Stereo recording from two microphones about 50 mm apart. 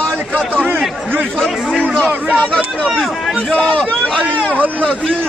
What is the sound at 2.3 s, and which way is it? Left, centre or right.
Speech, centre.